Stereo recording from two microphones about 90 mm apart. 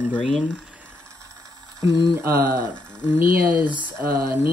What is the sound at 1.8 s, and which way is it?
Speech, 40° right (ahead or behind).